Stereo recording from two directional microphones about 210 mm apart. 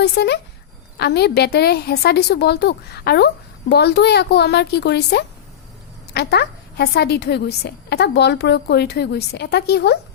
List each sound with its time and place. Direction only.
0.0 s a woman's voice: 55° left (ahead or behind)